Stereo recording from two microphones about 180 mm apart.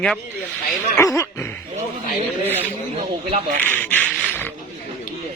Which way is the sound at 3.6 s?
10° left (ahead or behind).